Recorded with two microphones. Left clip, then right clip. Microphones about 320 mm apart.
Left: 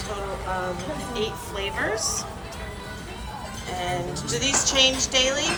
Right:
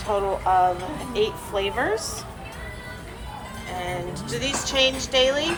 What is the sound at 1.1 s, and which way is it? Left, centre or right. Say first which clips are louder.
Speech: right 7 dB; centre.